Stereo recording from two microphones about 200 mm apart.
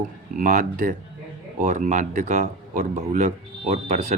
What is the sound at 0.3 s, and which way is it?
Speech, 40° right (ahead or behind).